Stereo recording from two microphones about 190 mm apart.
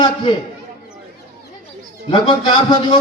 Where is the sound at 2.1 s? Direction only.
30° left (ahead or behind).